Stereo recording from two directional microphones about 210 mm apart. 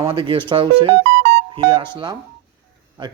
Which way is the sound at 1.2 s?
55° right (ahead or behind).